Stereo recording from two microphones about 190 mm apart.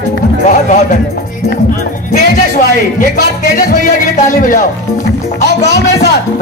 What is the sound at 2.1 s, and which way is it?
Speech, 45° left (ahead or behind).